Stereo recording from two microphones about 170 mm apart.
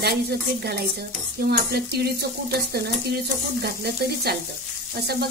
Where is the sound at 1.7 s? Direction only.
70° right (ahead or behind).